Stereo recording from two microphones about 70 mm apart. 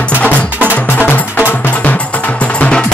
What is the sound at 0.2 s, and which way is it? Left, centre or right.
Music, centre.